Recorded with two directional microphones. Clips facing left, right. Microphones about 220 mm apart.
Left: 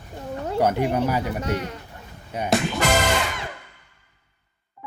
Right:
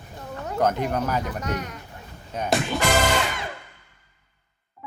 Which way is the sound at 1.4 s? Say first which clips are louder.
Left 3 dB; 30° left (ahead or behind).